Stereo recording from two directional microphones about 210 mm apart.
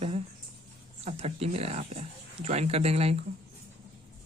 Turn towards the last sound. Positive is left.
turn(degrees=-30)  # may be behind; listen again after turning